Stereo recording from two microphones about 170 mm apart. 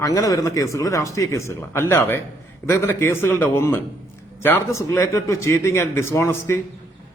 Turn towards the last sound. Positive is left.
turn(degrees=15)  # may be behind; listen again after turning